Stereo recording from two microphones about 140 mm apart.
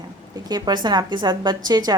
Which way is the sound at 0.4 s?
30° right (ahead or behind).